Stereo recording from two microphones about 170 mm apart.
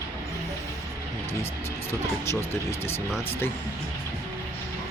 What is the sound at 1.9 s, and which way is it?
Speech, 15° left (ahead or behind).